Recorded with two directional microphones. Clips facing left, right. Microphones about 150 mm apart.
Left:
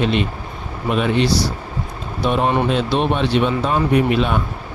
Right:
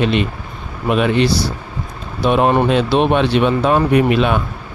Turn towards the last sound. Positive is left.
turn(degrees=-75)  # may be behind; listen again after turning